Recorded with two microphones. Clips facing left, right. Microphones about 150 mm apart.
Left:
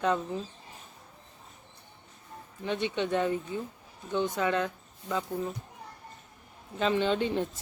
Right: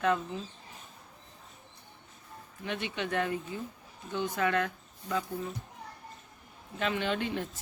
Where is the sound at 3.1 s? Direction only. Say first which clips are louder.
Left 3 dB; 25° left (ahead or behind).